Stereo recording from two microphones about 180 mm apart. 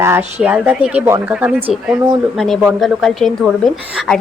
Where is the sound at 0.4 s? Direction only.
5° right (ahead or behind).